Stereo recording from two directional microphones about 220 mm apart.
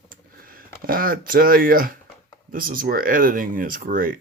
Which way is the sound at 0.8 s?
40° right (ahead or behind).